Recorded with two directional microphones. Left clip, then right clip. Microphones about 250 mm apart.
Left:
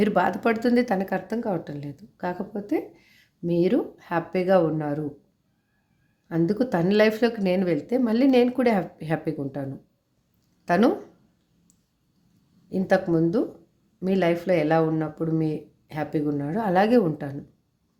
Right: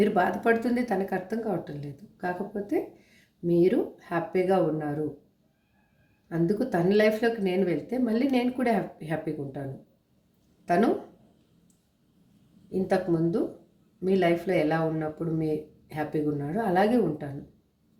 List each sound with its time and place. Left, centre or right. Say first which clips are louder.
0.0 s speech: left 2 dB; left
6.2 s speech: left 3 dB; left
10.7 s speech: left 3 dB; left
12.7 s speech: left 4 dB; left